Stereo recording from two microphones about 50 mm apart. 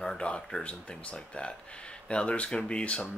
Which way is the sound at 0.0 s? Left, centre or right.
Centre.